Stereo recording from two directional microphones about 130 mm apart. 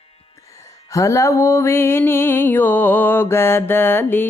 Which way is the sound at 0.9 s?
25° left (ahead or behind).